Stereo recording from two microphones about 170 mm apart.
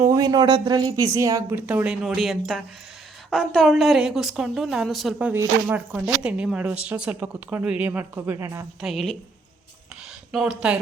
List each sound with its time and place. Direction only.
0.0 s a woman's voice: 20° right (ahead or behind)
8.8 s a woman's voice: centre (ahead or behind)
10.3 s a woman's voice: 5° right (ahead or behind)